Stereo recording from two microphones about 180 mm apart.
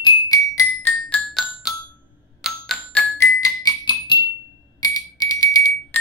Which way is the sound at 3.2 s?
20° left (ahead or behind).